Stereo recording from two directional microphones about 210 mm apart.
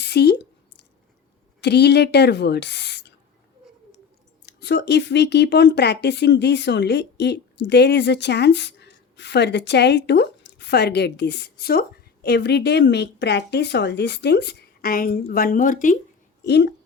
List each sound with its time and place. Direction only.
0.0 s a woman's voice: 50° left (ahead or behind)
1.6 s speech: 50° left (ahead or behind)
4.4 s speech: 55° left (ahead or behind)
16.4 s speech: 55° left (ahead or behind)